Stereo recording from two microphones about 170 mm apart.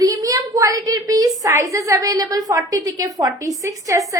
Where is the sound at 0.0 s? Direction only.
20° right (ahead or behind).